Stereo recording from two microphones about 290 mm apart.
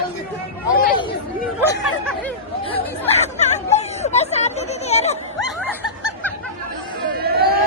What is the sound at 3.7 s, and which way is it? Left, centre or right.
Speech, left.